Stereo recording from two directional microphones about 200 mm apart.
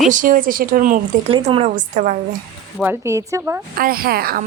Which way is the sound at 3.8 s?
50° right (ahead or behind).